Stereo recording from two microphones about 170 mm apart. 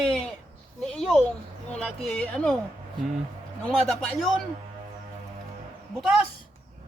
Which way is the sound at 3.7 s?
Centre (ahead or behind).